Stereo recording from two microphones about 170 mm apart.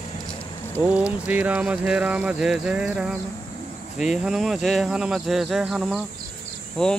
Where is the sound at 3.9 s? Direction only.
5° right (ahead or behind).